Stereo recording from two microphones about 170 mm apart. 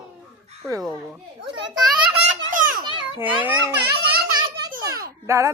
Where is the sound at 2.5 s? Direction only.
50° right (ahead or behind).